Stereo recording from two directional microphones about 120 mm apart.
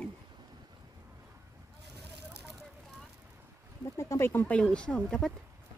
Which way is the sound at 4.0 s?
20° left (ahead or behind).